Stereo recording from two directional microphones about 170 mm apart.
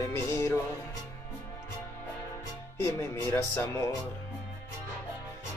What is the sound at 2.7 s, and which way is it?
Speech, 15° left (ahead or behind).